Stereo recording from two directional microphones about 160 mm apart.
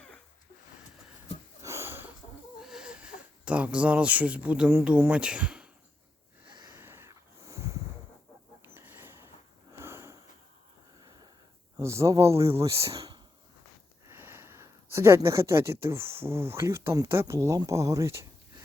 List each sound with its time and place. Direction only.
1.6 s sniff: 15° right (ahead or behind)
2.6 s speech: 5° right (ahead or behind)
6.5 s snort: 25° right (ahead or behind)
6.7 s snort: 15° right (ahead or behind)
8.6 s a sound: 15° right (ahead or behind)
11.8 s speech: 20° right (ahead or behind)
12.8 s speech: 35° right (ahead or behind)
14.1 s speech: 15° right (ahead or behind)